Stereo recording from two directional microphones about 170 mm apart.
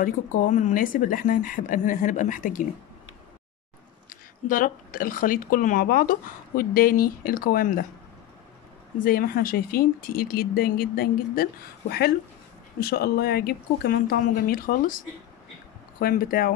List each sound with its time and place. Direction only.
0.0 s a woman's voice: 50° left (ahead or behind)
4.1 s speech: 55° left (ahead or behind)
9.0 s speech: 60° left (ahead or behind)
12.8 s speech: 65° left (ahead or behind)
16.0 s speech: 60° left (ahead or behind)